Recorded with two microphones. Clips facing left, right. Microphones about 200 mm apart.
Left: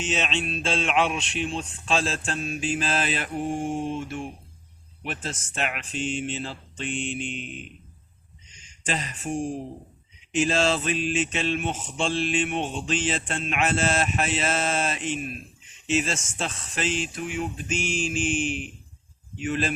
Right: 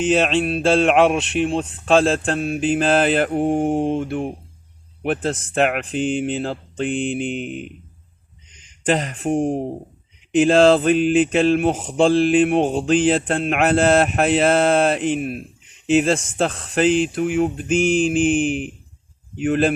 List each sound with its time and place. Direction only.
0.0 s mantra: 55° right (ahead or behind)
8.5 s speech: 60° right (ahead or behind)
10.3 s mantra: 60° right (ahead or behind)